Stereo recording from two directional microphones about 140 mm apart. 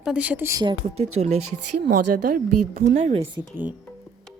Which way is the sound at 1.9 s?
85° right.